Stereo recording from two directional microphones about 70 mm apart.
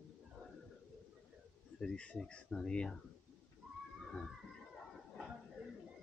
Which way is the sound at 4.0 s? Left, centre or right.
Centre.